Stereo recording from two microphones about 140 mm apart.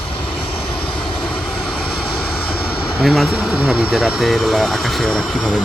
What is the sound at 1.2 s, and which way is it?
Speech, 5° left (ahead or behind).